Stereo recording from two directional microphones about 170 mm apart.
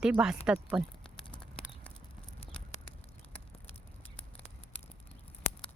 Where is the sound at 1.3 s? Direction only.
5° left (ahead or behind).